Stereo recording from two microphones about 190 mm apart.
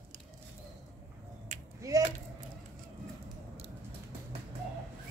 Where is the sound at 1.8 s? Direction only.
20° right (ahead or behind).